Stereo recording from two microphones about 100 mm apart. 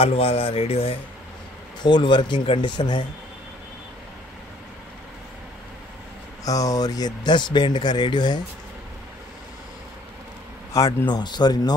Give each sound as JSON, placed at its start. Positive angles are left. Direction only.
{"t": 0.0, "sound": "speech", "side_deg": 80}
{"t": 1.8, "sound": "speech", "side_deg": 50}
{"t": 6.4, "sound": "speech", "side_deg": 35}
{"t": 10.8, "sound": "a man's voice", "side_deg": 30}
{"t": 11.1, "sound": "speech", "side_deg": 45}